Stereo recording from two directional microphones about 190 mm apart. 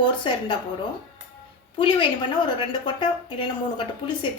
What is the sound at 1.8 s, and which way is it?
A woman's voice, 25° left (ahead or behind).